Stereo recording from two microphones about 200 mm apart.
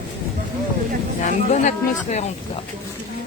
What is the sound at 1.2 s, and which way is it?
Speech, 35° left (ahead or behind).